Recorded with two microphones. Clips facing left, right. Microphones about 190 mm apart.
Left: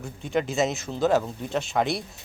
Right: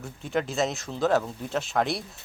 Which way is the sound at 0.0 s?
Centre (ahead or behind).